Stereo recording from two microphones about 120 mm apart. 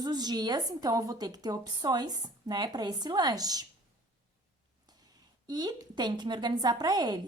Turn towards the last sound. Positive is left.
turn(degrees=-35)  # may be behind; listen again after turning